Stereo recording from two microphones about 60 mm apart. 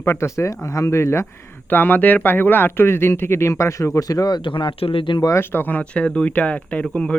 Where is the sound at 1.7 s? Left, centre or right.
Left.